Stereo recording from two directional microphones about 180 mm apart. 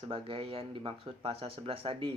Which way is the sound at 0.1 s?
30° right (ahead or behind).